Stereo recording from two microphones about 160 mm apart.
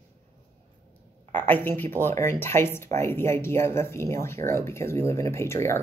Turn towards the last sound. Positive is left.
turn(degrees=15)  # may be behind; listen again after turning